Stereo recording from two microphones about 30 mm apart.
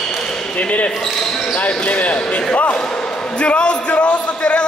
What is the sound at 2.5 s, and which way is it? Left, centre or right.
Basketball bounce, left.